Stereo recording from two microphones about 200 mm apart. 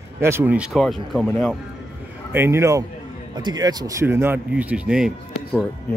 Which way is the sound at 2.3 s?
10° right (ahead or behind).